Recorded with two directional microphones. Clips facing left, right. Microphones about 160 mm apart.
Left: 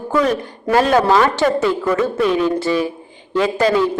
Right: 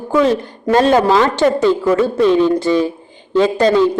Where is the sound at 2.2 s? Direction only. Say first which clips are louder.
Right 6 dB; 30° right (ahead or behind).